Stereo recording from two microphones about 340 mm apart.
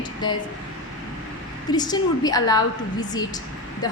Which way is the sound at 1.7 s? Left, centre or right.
Centre.